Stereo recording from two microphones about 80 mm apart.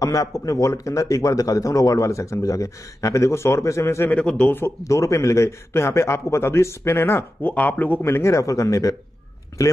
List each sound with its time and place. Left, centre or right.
0.0 s speech: left
4.1 s speech: centre
4.5 s speech: left
4.8 s speech: left
8.0 s speech: left